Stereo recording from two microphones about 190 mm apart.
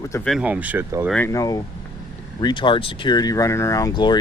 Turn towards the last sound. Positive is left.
turn(degrees=25)  # may be behind; listen again after turning